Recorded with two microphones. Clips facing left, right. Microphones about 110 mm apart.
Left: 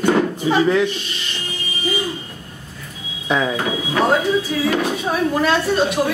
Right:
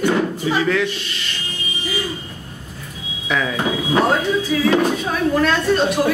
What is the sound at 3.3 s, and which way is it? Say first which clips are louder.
Speech: left 2 dB; 25° left (ahead or behind).